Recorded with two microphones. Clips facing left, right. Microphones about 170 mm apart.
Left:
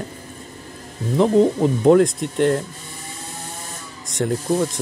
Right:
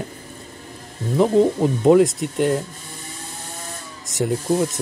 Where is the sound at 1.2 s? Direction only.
Centre (ahead or behind).